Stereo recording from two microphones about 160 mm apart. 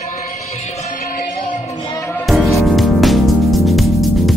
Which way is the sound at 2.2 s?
Centre (ahead or behind).